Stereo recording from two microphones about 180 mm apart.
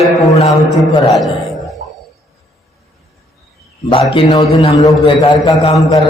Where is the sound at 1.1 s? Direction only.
Centre (ahead or behind).